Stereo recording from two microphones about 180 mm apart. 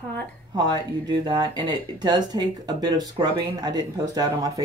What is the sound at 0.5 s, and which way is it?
Speech, 20° right (ahead or behind).